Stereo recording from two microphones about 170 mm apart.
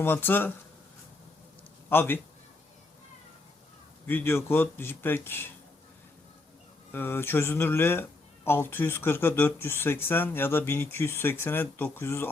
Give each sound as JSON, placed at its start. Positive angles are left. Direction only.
{"t": 0.0, "sound": "speech", "side_deg": 10}
{"t": 1.9, "sound": "a man's voice", "side_deg": 10}
{"t": 4.0, "sound": "speech", "side_deg": 10}
{"t": 6.9, "sound": "speech", "side_deg": 15}